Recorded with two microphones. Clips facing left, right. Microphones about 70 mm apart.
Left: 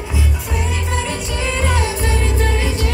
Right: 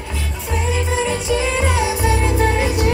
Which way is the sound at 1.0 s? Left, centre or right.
Centre.